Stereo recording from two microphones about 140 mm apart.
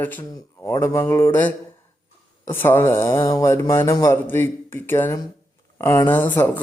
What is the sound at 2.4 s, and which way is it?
A man's voice, 15° left (ahead or behind).